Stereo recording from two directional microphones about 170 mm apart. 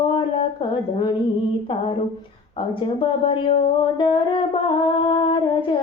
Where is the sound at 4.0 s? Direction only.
30° left (ahead or behind).